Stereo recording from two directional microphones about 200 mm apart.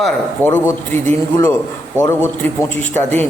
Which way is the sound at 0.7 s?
15° left (ahead or behind).